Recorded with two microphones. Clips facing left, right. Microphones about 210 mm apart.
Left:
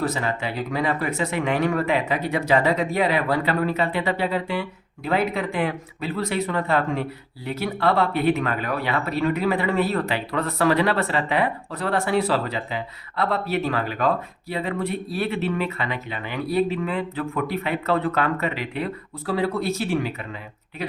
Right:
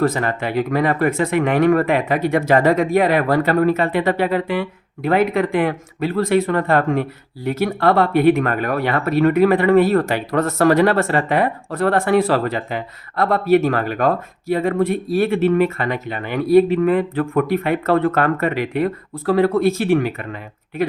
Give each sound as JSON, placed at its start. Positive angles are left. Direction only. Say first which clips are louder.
{"t": 0.0, "sound": "speech", "louder": "right 6 dB", "side_deg": -55}